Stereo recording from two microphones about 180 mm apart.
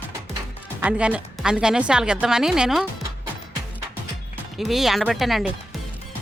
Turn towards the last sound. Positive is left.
turn(degrees=0)  # may be behind; listen again after turning